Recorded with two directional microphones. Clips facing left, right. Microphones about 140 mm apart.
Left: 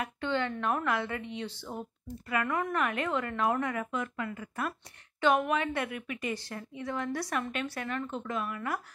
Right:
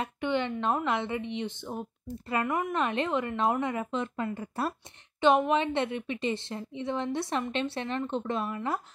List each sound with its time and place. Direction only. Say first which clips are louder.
0.0 s a woman's voice: right 2 dB; 20° right (ahead or behind)